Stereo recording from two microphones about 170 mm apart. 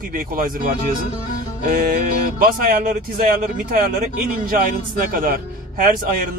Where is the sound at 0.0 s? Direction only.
55° right (ahead or behind).